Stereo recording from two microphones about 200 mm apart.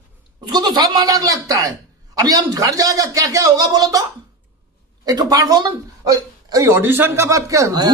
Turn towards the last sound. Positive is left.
turn(degrees=-20)  # may be behind; listen again after turning